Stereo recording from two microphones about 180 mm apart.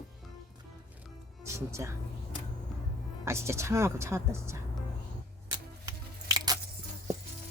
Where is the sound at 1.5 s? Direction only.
15° right (ahead or behind).